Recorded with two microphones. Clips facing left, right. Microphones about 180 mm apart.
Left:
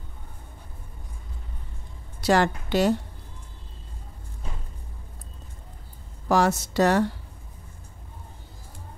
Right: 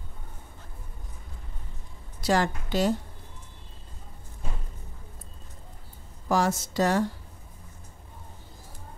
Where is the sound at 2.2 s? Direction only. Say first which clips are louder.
Left 4 dB; 70° left (ahead or behind).